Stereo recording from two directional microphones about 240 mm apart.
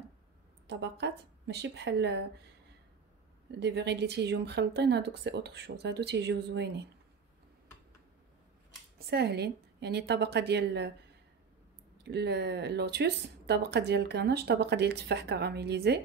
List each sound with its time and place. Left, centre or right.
0.7 s speech: right
3.5 s speech: right
8.9 s speech: right
12.0 s speech: right